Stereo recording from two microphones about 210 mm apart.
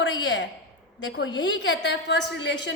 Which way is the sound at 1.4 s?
55° left (ahead or behind).